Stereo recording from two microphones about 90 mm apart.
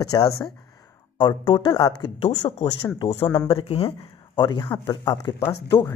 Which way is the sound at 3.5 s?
85° left.